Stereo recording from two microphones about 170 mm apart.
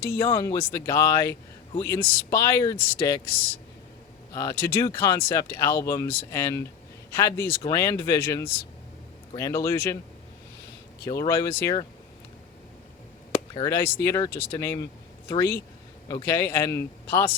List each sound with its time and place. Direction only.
0.0 s speech: 15° left (ahead or behind)
4.4 s speech: 15° left (ahead or behind)
11.0 s speech: 20° left (ahead or behind)
13.3 s a sound: 20° left (ahead or behind)
13.7 s speech: 15° left (ahead or behind)